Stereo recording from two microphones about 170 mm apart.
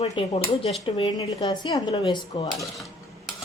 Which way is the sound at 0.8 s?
25° left (ahead or behind).